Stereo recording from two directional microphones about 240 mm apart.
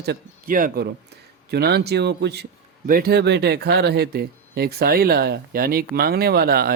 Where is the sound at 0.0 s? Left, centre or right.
Right.